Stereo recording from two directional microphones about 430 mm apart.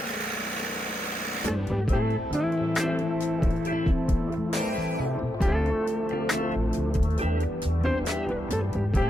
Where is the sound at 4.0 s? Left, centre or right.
Centre.